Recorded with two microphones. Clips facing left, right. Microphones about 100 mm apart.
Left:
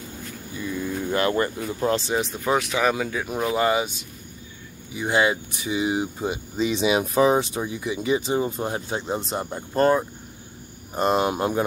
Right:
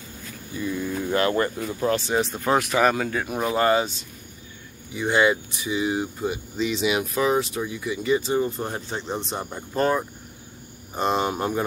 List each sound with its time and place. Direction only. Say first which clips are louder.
0.7 s cricket: even; 5° right (ahead or behind)
1.1 s speech: even; 20° left (ahead or behind)
2.1 s speech: right 1 dB; centre (ahead or behind)
2.9 s speech: even; 10° left (ahead or behind)
4.9 s speech: right 1 dB; 10° left (ahead or behind)